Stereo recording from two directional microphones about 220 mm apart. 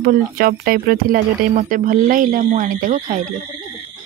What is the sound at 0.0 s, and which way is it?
Speech, 40° right (ahead or behind).